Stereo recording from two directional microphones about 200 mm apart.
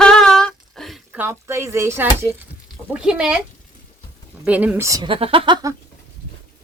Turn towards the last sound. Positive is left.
turn(degrees=-20)  # may be behind; listen again after turning